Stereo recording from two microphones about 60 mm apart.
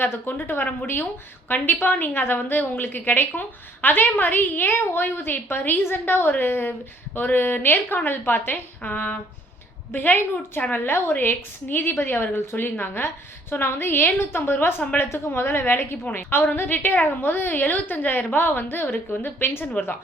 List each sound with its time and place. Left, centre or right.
0.0 s a woman's voice: left